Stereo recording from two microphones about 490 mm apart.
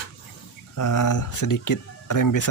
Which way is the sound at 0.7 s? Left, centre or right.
Left.